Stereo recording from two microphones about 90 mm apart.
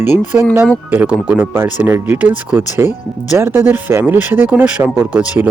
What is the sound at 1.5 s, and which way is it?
Speech, 25° right (ahead or behind).